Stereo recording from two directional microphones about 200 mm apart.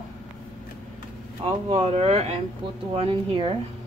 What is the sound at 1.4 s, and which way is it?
Speech, 30° right (ahead or behind).